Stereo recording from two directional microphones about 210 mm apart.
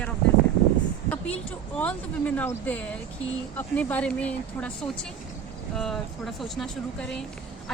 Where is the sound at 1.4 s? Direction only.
5° left (ahead or behind).